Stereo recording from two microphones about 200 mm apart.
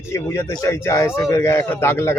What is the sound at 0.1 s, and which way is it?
A man's voice, 15° left (ahead or behind).